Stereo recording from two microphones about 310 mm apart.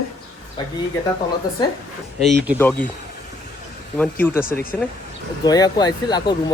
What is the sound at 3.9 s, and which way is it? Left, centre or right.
Speech, centre.